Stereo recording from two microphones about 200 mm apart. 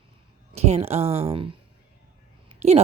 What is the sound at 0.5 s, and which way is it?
Speech, 30° right (ahead or behind).